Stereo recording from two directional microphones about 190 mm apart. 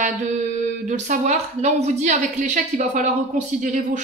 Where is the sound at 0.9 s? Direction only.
40° right (ahead or behind).